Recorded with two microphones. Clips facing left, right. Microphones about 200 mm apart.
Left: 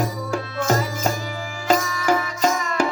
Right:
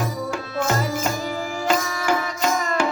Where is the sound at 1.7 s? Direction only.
40° left (ahead or behind).